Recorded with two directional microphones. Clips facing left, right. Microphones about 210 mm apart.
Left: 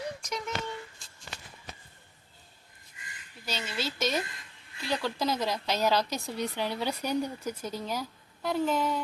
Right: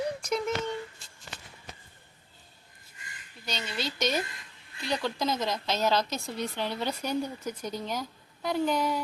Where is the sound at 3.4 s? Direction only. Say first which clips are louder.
Even; 5° left (ahead or behind).